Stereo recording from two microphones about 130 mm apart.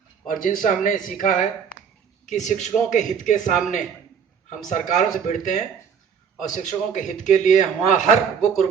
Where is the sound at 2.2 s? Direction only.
70° left (ahead or behind).